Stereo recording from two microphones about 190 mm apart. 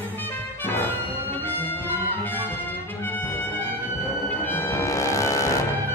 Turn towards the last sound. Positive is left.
turn(degrees=15)  # may be behind; listen again after turning